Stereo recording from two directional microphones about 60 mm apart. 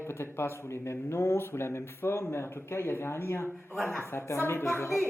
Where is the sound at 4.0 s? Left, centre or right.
Left.